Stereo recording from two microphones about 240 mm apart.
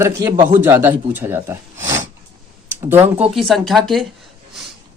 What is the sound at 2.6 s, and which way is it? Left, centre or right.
Speech, centre.